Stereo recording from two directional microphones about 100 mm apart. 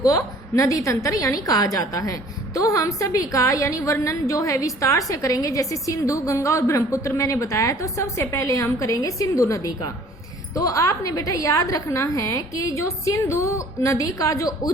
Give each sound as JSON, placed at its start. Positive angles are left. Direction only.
{"t": 0.0, "sound": "a woman's voice", "side_deg": 35}